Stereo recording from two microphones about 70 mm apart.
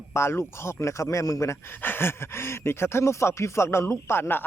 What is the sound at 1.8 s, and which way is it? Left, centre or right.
Speech, left.